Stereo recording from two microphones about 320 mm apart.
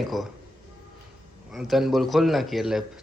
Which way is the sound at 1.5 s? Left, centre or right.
Centre.